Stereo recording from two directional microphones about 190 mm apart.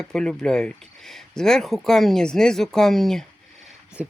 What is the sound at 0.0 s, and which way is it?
Speech, 5° left (ahead or behind).